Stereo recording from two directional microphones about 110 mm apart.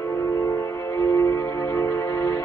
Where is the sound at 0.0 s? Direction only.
30° left (ahead or behind).